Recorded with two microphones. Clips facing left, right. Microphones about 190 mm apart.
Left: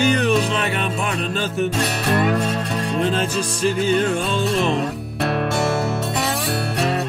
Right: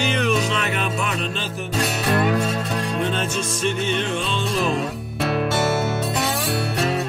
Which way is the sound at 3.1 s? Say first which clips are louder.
Left 3 dB; 35° left (ahead or behind).